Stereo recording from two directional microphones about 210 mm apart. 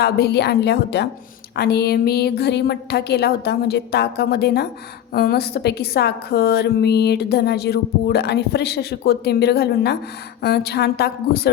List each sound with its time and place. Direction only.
0.0 s a woman's voice: 50° left (ahead or behind)